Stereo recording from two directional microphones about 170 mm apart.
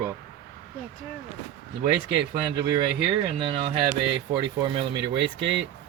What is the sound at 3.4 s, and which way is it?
Speech, 30° right (ahead or behind).